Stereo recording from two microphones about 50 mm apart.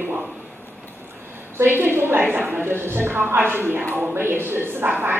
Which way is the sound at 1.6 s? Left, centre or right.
Right.